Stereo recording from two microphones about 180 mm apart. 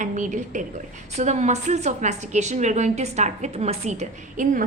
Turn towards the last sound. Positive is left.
turn(degrees=-45)  # may be behind; listen again after turning